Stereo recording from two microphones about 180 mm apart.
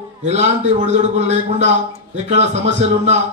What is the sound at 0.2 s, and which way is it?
Speech, 40° right (ahead or behind).